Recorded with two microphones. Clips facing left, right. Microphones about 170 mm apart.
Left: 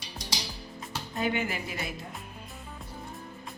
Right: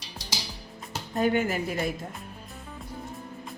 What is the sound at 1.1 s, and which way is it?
Speech, 45° right (ahead or behind).